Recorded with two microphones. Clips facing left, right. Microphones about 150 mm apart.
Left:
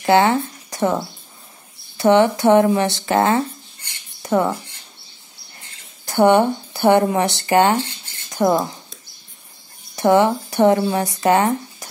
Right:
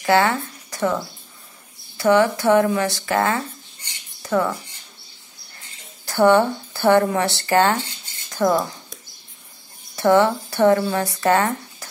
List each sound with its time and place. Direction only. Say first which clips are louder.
0.0 s speech: left 3 dB; 20° left (ahead or behind)
6.0 s speech: left 1 dB; 20° left (ahead or behind)
9.9 s speech: left 1 dB; 15° left (ahead or behind)